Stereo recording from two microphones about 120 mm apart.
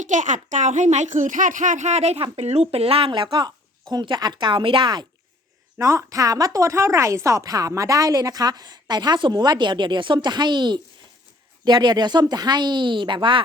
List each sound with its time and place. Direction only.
0.0 s speech: 90° right; by 5.0 s 40° right (ahead or behind)
5.7 s a woman's voice: 25° right (ahead or behind); by 13.4 s 45° right (ahead or behind)